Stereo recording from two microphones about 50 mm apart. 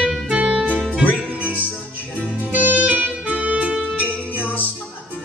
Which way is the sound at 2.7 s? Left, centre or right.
Right.